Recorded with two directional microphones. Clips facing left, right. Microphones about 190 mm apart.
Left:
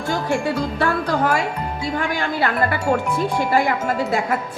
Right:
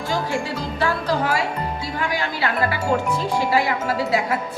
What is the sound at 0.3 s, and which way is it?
A woman's voice, 55° left (ahead or behind).